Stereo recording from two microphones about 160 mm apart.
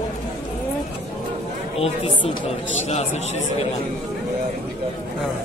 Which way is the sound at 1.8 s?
35° left (ahead or behind).